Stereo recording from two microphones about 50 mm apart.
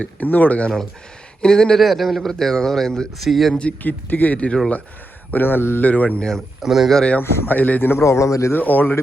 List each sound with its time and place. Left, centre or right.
0.0 s speech: left
1.4 s a man's voice: centre
3.6 s speech: left
5.3 s a man's voice: left
5.8 s speech: left
6.6 s speech: centre
7.2 s a man's voice: left
8.0 s speech: left
8.5 s speech: left